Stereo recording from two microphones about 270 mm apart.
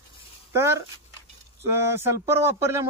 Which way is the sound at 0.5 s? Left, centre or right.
Centre.